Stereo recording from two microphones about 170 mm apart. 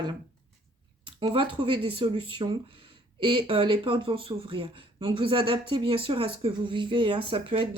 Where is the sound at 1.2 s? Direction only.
30° right (ahead or behind).